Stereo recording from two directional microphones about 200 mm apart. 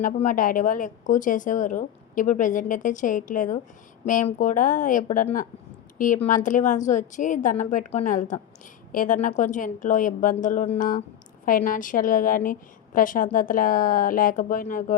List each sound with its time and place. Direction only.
0.0 s a woman's voice: 40° left (ahead or behind)